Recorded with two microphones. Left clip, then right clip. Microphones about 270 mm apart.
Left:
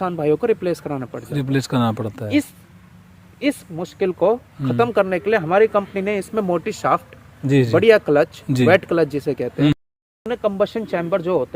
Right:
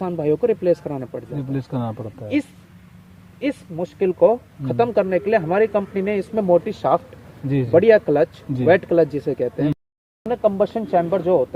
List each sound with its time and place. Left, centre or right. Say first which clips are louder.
0.0 s speech: left 1 dB; centre
1.4 s speech: left 8 dB; left
3.4 s speech: left 2 dB; centre
7.4 s a man's voice: left 6 dB; left
7.8 s speech: right 1 dB; centre